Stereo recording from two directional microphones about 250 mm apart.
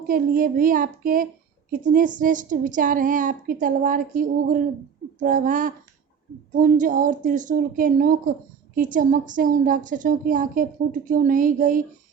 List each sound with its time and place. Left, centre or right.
0.1 s a woman's voice: right